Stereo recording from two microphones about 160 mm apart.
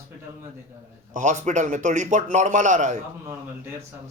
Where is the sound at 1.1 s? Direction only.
50° right (ahead or behind).